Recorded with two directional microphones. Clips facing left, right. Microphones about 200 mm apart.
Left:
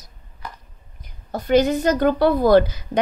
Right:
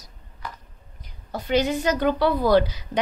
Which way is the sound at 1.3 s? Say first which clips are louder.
Left 5 dB; 50° left (ahead or behind).